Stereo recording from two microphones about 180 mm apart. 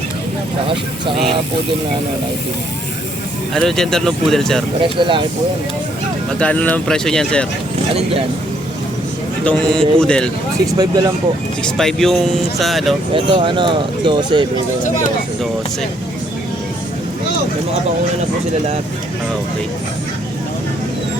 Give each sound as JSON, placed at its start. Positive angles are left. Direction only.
{"t": 3.5, "sound": "speech", "side_deg": 0}
{"t": 4.8, "sound": "speech", "side_deg": -25}
{"t": 6.4, "sound": "speech", "side_deg": 5}
{"t": 9.4, "sound": "speech", "side_deg": 5}
{"t": 10.7, "sound": "speech", "side_deg": -20}
{"t": 11.6, "sound": "speech", "side_deg": 0}
{"t": 13.1, "sound": "speech", "side_deg": -25}